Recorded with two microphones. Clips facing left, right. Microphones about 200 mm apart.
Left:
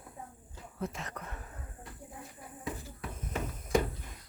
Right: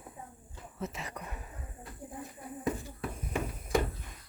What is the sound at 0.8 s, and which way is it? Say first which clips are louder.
Speech: left 1 dB; 5° right (ahead or behind).